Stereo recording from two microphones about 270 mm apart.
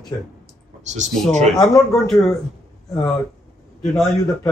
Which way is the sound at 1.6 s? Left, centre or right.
Centre.